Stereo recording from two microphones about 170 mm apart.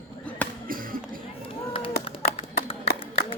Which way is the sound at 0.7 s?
55° right (ahead or behind).